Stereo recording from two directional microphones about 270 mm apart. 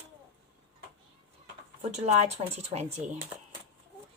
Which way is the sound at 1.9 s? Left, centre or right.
Right.